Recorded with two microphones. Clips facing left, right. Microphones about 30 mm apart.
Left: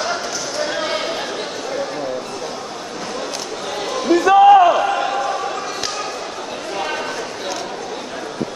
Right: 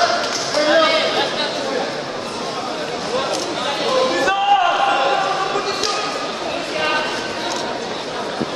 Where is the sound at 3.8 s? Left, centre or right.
Right.